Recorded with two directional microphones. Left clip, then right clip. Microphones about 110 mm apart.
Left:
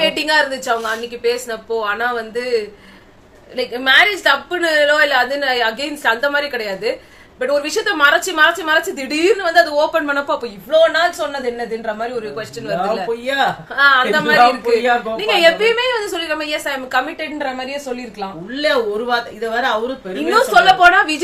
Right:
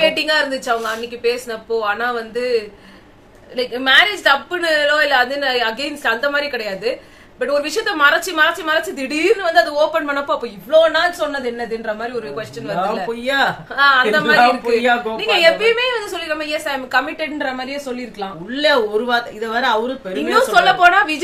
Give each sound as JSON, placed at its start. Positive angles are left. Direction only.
{"t": 0.0, "sound": "a woman's voice", "side_deg": 20}
{"t": 12.8, "sound": "a woman's voice", "side_deg": 30}
{"t": 13.2, "sound": "a woman's voice", "side_deg": -35}
{"t": 13.7, "sound": "a woman's voice", "side_deg": 20}
{"t": 18.5, "sound": "a woman's voice", "side_deg": -35}
{"t": 20.3, "sound": "a woman's voice", "side_deg": 20}